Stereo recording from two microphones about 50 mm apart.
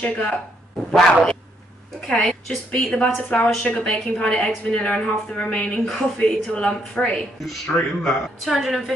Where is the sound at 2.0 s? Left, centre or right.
Centre.